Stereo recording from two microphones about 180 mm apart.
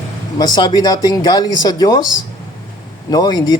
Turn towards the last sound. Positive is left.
turn(degrees=25)  # may be behind; listen again after turning